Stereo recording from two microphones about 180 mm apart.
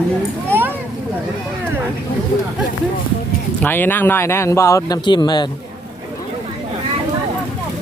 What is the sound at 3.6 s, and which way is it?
Speech, 10° left (ahead or behind).